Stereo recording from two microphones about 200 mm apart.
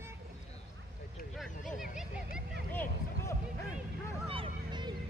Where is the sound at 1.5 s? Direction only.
40° left (ahead or behind).